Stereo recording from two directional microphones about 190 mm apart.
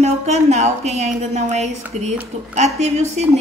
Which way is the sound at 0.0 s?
35° right (ahead or behind).